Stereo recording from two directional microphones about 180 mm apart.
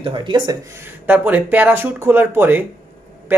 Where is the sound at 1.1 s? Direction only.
10° right (ahead or behind).